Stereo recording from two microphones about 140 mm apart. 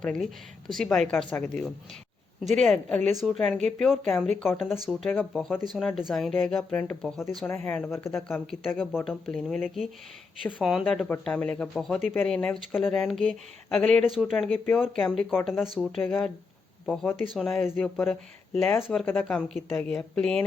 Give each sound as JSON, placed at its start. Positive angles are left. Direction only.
{"t": 0.0, "sound": "speech", "side_deg": 5}
{"t": 2.7, "sound": "speech", "side_deg": 5}
{"t": 8.1, "sound": "speech", "side_deg": 0}
{"t": 10.6, "sound": "speech", "side_deg": -5}
{"t": 10.8, "sound": "speech", "side_deg": 5}
{"t": 15.4, "sound": "speech", "side_deg": 0}
{"t": 15.8, "sound": "speech", "side_deg": 15}
{"t": 16.8, "sound": "speech", "side_deg": 5}
{"t": 17.6, "sound": "speech", "side_deg": 15}
{"t": 17.9, "sound": "speech", "side_deg": 0}